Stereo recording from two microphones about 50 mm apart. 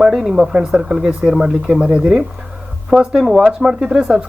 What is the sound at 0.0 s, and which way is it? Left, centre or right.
Speech, centre.